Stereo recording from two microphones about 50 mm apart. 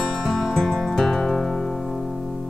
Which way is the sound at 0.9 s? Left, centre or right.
Centre.